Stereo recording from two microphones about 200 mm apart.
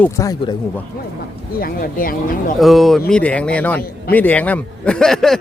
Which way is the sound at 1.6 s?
45° left (ahead or behind).